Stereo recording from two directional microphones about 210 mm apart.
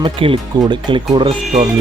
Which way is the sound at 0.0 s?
25° right (ahead or behind).